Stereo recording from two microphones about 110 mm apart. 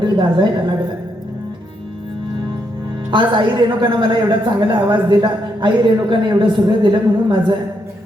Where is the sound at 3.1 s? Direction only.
45° right (ahead or behind).